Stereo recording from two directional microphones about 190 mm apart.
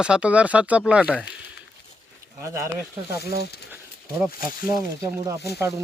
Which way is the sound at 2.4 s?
15° right (ahead or behind).